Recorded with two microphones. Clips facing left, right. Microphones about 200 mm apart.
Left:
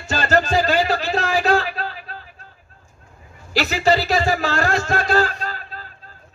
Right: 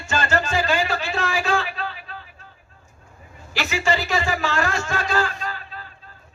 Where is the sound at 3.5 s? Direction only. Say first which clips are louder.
Left 5 dB; 40° left (ahead or behind).